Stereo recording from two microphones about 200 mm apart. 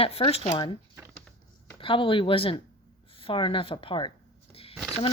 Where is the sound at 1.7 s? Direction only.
25° left (ahead or behind).